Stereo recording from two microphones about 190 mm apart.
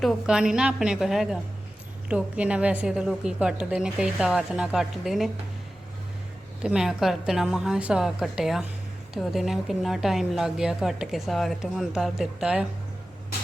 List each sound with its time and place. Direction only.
0.0 s a woman's voice: 5° right (ahead or behind)
6.6 s a woman's voice: 5° right (ahead or behind)